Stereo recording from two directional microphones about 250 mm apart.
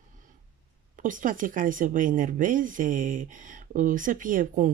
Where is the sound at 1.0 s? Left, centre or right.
Right.